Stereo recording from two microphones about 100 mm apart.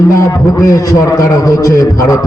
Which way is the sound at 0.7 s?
35° left (ahead or behind).